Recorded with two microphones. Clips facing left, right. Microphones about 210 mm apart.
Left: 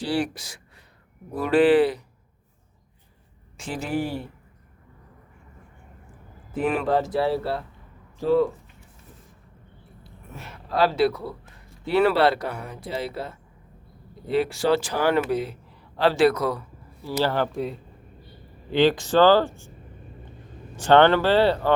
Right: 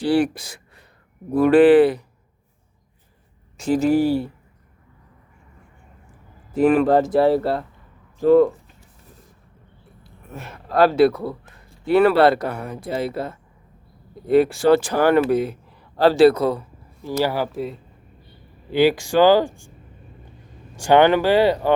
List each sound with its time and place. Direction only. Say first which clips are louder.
0.0 s speech: right 7 dB; 55° right (ahead or behind)
3.6 s a man's voice: right 10 dB; 40° right (ahead or behind)
6.6 s speech: right 7 dB; 45° right (ahead or behind)
10.3 s speech: right 6 dB; 50° right (ahead or behind)
16.0 s a man's voice: right 6 dB; 40° right (ahead or behind)
17.2 s speech: right 1 dB; 5° right (ahead or behind)
20.7 s speech: right 2 dB; 10° right (ahead or behind)